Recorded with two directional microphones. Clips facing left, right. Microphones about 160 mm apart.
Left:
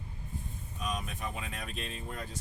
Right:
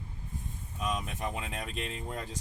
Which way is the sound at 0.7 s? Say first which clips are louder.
Right 3 dB; 90° right.